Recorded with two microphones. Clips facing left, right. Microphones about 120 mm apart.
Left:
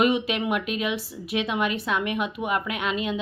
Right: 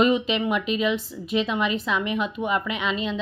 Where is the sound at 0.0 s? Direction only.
5° left (ahead or behind).